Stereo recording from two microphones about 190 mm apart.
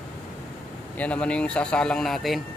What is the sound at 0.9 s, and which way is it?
A man's voice, 5° left (ahead or behind).